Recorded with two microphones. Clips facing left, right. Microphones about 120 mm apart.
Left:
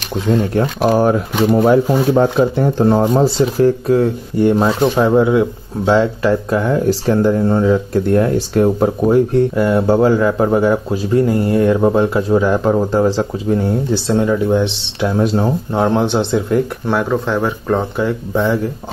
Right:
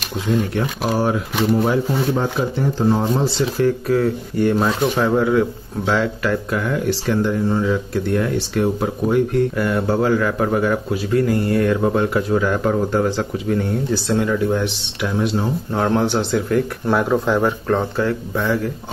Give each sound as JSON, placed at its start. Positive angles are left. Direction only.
{"t": 0.9, "sound": "speech", "side_deg": 45}
{"t": 1.5, "sound": "speech", "side_deg": 60}
{"t": 3.2, "sound": "speech", "side_deg": 40}
{"t": 9.6, "sound": "speech", "side_deg": 25}
{"t": 15.1, "sound": "speech", "side_deg": 40}
{"t": 15.7, "sound": "speech", "side_deg": 20}
{"t": 16.8, "sound": "speech", "side_deg": 0}
{"t": 17.6, "sound": "speech", "side_deg": 10}